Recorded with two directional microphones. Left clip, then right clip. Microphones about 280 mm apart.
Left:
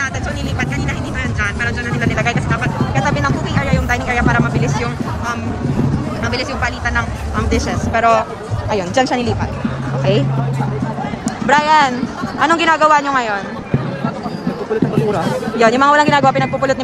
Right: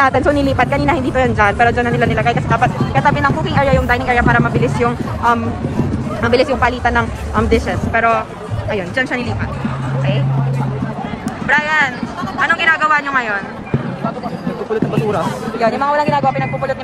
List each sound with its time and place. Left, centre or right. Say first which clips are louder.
0.0 s a man's voice: right 9 dB; centre
11.4 s a man's voice: left 3 dB; centre
15.6 s a man's voice: left 4 dB; left